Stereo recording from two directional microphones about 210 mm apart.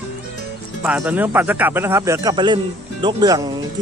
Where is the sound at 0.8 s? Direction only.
5° right (ahead or behind).